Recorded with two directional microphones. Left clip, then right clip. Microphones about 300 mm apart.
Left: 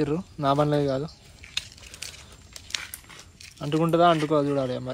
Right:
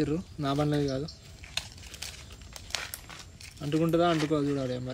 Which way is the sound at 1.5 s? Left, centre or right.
Right.